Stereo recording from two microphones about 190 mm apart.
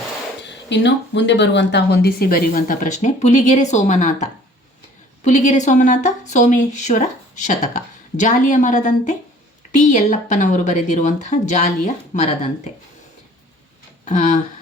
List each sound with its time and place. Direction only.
0.4 s a woman's voice: 65° left (ahead or behind); by 12.7 s 35° left (ahead or behind)
14.0 s speech: 40° left (ahead or behind)